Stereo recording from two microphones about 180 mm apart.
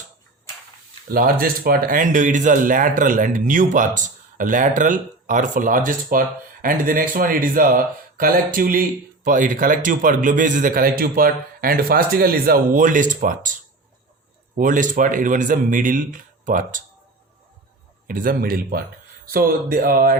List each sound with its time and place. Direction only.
1.1 s speech: 55° right (ahead or behind)
14.5 s speech: 45° right (ahead or behind)
18.1 s speech: 50° right (ahead or behind)